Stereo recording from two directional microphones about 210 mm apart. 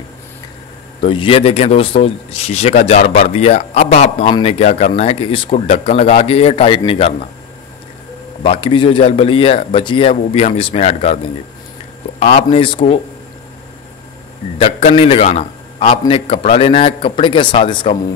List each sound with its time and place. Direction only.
1.0 s speech: 25° left (ahead or behind)
8.5 s speech: 25° left (ahead or behind)
12.2 s speech: 30° left (ahead or behind)
14.6 s speech: 30° left (ahead or behind)